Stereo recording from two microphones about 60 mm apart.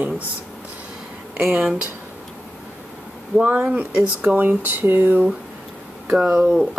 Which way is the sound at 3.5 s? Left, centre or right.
Right.